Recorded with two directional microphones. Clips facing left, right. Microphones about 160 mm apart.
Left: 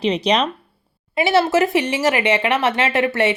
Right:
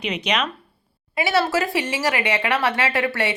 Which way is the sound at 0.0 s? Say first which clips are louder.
Left 6 dB; 35° left (ahead or behind).